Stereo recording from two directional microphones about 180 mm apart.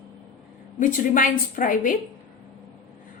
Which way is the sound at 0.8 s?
45° left (ahead or behind).